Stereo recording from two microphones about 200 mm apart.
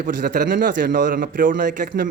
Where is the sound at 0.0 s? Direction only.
40° right (ahead or behind).